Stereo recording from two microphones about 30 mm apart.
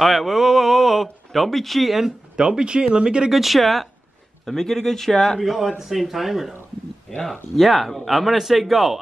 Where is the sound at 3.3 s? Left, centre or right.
Centre.